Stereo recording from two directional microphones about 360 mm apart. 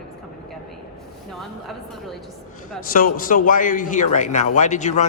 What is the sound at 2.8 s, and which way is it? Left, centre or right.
A man's voice, left.